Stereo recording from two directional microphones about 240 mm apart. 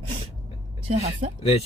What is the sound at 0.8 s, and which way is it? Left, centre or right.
Speech, right.